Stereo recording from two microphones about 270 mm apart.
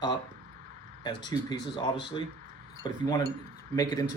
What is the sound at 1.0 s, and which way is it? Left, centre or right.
Speech, centre.